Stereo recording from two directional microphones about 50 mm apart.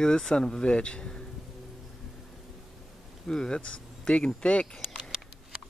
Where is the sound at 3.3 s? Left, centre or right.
Centre.